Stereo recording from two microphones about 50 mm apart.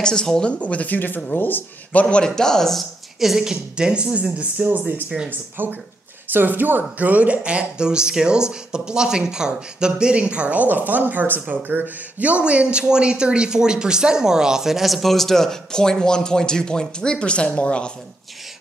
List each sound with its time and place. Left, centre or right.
0.0 s speech: centre
0.6 s speech: left
1.9 s speech: left; by 2.8 s centre
3.2 s speech: centre
5.6 s speech: right; by 17.9 s left